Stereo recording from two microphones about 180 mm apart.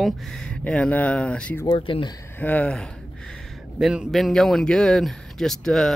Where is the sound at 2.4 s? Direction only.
10° left (ahead or behind).